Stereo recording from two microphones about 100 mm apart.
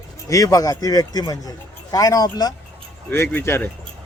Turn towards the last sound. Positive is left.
turn(degrees=20)  # may be behind; listen again after turning